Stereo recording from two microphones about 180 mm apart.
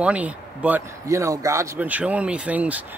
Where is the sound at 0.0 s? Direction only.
5° right (ahead or behind).